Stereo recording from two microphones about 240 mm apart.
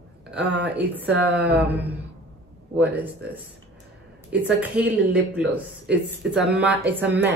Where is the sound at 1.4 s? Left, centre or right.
Centre.